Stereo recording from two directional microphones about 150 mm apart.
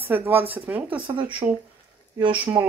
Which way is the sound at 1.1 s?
35° right (ahead or behind).